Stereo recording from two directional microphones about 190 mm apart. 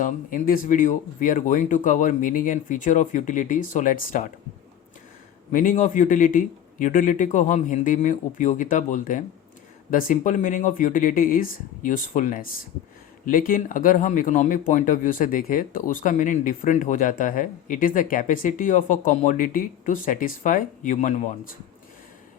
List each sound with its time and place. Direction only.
0.0 s speech: 45° left (ahead or behind)
5.5 s speech: 45° left (ahead or behind)